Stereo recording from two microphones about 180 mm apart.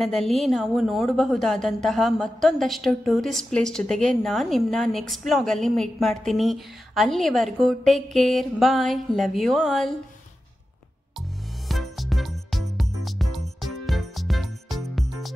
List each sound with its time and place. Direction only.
0.0 s a woman's voice: centre (ahead or behind)
11.7 s music: centre (ahead or behind)